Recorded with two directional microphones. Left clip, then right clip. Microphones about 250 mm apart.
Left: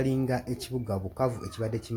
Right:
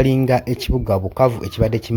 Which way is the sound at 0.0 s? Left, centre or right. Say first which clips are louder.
Right 12 dB; right.